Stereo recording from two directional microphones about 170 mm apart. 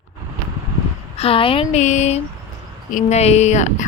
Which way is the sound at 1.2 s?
30° left (ahead or behind).